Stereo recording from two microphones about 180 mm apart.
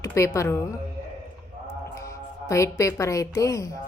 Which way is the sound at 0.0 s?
15° left (ahead or behind).